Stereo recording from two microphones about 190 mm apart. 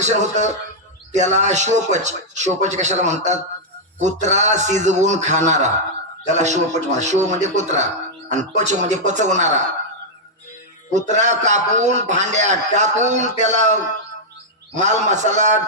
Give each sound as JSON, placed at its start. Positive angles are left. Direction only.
{"t": 0.0, "sound": "a man's voice", "side_deg": -40}
{"t": 10.9, "sound": "a man's voice", "side_deg": -40}
{"t": 14.8, "sound": "a man's voice", "side_deg": -40}